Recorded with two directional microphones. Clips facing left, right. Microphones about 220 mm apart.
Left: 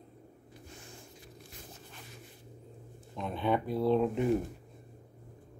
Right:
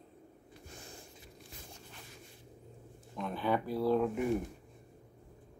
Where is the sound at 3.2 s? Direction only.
20° left (ahead or behind).